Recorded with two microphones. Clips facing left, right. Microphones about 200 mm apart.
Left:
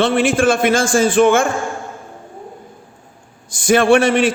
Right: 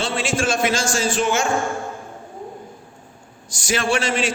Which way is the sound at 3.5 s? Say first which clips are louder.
Left 10 dB; 55° left (ahead or behind).